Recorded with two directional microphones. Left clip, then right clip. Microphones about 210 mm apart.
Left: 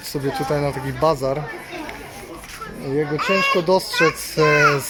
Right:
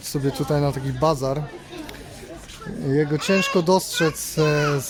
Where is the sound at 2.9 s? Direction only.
30° right (ahead or behind).